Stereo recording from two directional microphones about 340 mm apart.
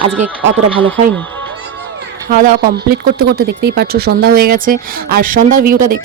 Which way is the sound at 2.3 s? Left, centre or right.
Right.